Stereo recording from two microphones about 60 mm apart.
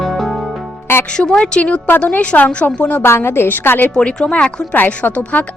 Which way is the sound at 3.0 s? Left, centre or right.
Left.